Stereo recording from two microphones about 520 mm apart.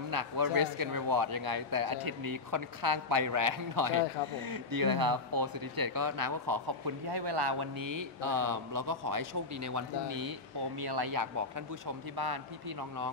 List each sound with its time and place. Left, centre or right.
0.1 s speech: right